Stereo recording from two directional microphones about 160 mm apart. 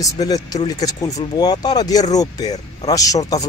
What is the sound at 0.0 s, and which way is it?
Speech, 25° left (ahead or behind).